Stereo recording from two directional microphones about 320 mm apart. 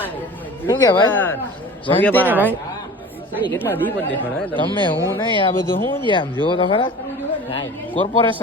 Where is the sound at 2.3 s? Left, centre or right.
Centre.